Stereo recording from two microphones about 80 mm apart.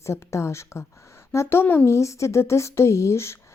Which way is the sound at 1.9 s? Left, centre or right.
Left.